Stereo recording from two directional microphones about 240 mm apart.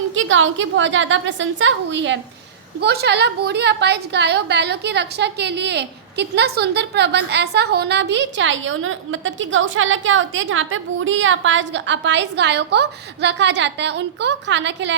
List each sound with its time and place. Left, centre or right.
0.1 s a woman's voice: right